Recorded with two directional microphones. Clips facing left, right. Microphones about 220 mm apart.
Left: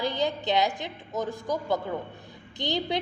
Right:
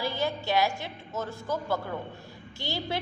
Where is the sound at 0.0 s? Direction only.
20° left (ahead or behind).